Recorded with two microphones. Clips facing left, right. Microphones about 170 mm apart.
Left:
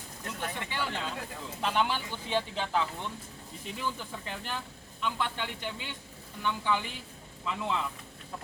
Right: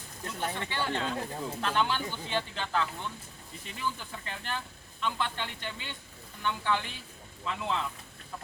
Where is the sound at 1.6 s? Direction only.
10° left (ahead or behind).